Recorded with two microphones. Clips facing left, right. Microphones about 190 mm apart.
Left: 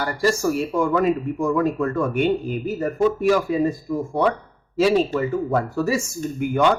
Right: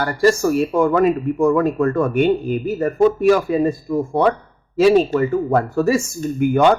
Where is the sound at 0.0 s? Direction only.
55° right (ahead or behind).